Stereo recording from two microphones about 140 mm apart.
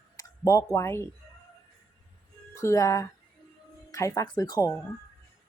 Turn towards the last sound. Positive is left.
turn(degrees=25)  # may be behind; listen again after turning